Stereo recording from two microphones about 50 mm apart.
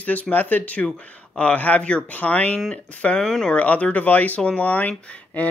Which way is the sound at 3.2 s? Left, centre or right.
Centre.